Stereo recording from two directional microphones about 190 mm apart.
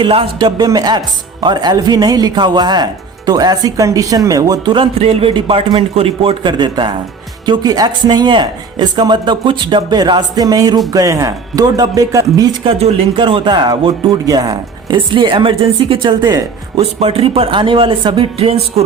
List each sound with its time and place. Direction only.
0.0 s speech: 25° right (ahead or behind)